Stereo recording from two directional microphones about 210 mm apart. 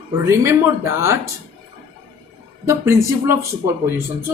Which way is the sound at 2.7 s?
15° right (ahead or behind).